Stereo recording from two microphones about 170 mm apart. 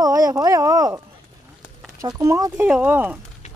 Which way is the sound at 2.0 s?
20° right (ahead or behind).